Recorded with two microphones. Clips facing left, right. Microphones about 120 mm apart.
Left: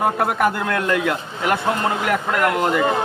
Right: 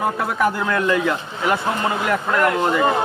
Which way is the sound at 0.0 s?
60° left (ahead or behind).